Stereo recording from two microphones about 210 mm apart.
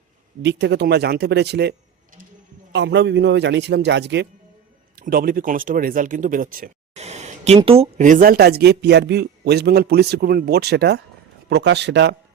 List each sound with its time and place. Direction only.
0.4 s speech: 55° right (ahead or behind)
2.7 s a man's voice: 55° right (ahead or behind)
4.9 s a man's voice: 45° right (ahead or behind)